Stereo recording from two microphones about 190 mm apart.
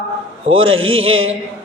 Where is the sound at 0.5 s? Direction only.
90° right.